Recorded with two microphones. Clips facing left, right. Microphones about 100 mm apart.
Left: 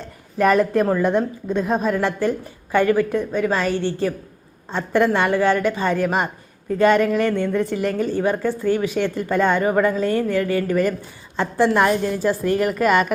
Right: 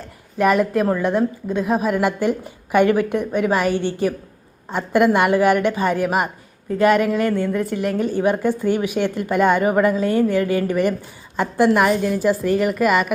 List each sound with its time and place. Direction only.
0.3 s a woman's voice: 5° right (ahead or behind)
8.1 s a woman's voice: 15° right (ahead or behind)